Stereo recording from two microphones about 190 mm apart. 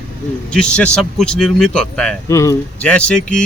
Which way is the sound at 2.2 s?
15° left (ahead or behind).